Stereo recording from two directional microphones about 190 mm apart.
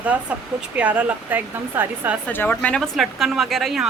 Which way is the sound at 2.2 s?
10° left (ahead or behind).